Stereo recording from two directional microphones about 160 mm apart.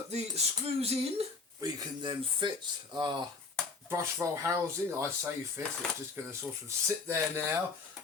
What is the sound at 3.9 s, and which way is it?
Speech, 15° right (ahead or behind).